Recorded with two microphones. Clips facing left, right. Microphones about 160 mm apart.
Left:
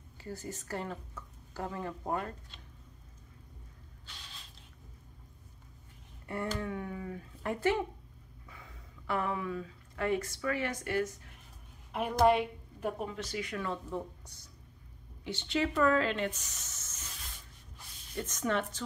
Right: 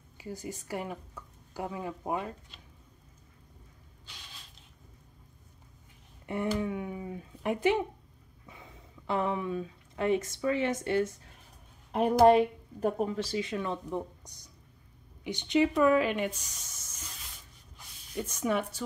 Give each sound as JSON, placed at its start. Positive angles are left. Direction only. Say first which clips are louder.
{"t": 0.2, "sound": "speech", "louder": "right 2 dB", "side_deg": -15}
{"t": 6.2, "sound": "a sound", "louder": "right 5 dB", "side_deg": -20}
{"t": 8.5, "sound": "speech", "louder": "right 3 dB", "side_deg": -20}
{"t": 12.3, "sound": "speech", "louder": "right 6 dB", "side_deg": -35}